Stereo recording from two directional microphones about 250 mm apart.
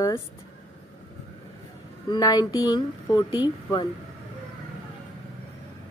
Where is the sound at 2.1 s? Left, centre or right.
Centre.